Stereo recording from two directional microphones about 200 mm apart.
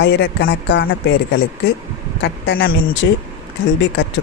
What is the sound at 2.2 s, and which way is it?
Speech, 50° left (ahead or behind).